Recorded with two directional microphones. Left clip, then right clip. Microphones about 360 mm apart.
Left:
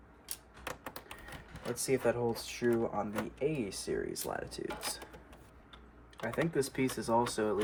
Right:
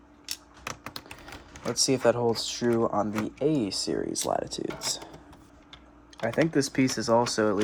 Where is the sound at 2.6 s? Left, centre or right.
Right.